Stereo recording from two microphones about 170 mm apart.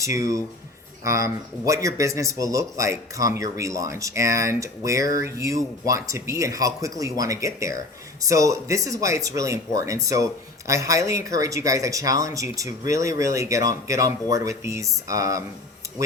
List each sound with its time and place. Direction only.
0.0 s speech: 20° right (ahead or behind)